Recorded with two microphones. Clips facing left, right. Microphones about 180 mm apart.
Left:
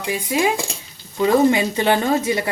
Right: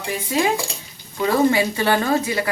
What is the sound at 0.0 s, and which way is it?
Speech, 15° left (ahead or behind).